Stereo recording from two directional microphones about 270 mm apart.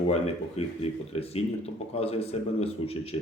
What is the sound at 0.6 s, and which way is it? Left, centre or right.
A man's voice, left.